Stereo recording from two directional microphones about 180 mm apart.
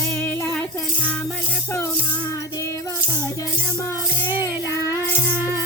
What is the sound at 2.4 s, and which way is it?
Music, 15° left (ahead or behind).